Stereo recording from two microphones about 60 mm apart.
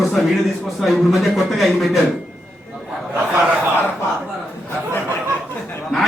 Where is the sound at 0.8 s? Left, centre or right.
Centre.